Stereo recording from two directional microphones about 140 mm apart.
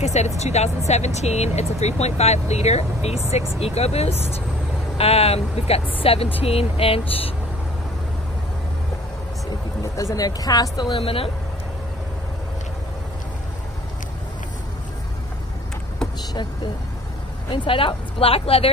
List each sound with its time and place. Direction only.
0.0 s speech: 50° left (ahead or behind)
9.9 s speech: 25° left (ahead or behind)
11.0 s speech: 40° left (ahead or behind)
17.5 s speech: 40° left (ahead or behind)